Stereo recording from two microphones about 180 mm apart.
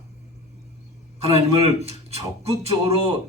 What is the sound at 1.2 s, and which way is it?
A man's voice, 35° right (ahead or behind).